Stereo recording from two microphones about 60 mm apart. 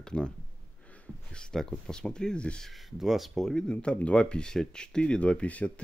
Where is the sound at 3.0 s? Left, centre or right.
Centre.